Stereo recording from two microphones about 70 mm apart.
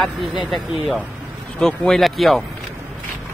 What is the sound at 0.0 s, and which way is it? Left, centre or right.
Speech, centre.